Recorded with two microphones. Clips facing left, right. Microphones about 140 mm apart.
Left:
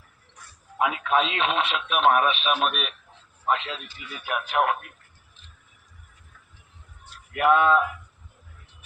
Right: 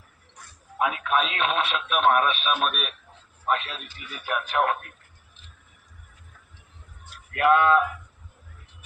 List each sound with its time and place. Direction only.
0.8 s a man's voice: 20° left (ahead or behind)
7.3 s speech: 15° left (ahead or behind)